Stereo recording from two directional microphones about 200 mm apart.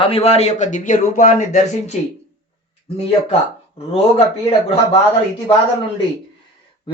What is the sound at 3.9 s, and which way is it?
Speech, 30° left (ahead or behind).